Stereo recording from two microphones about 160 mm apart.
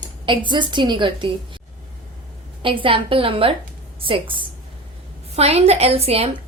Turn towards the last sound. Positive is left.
turn(degrees=-40)  # may be behind; listen again after turning